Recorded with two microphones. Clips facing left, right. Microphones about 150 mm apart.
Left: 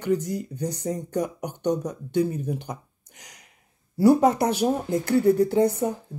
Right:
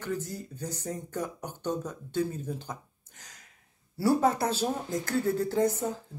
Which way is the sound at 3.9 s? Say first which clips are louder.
Left 7 dB; 15° left (ahead or behind).